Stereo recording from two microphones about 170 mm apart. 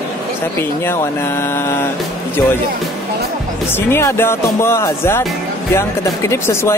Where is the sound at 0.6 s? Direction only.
15° left (ahead or behind).